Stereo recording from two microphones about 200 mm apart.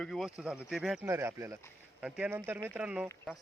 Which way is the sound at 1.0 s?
10° right (ahead or behind).